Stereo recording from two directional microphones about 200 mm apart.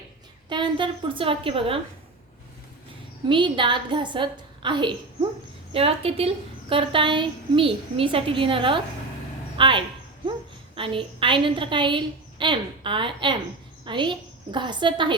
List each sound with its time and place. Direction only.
0.4 s a woman's voice: 25° right (ahead or behind)
3.2 s a woman's voice: 25° right (ahead or behind)